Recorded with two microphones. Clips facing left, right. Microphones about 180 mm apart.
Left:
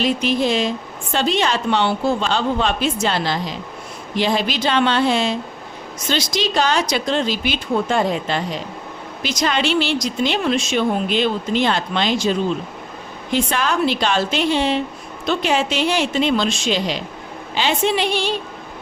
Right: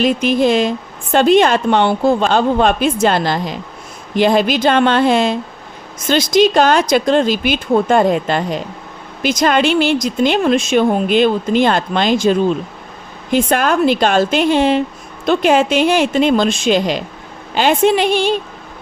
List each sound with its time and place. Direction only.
0.0 s speech: 50° right (ahead or behind)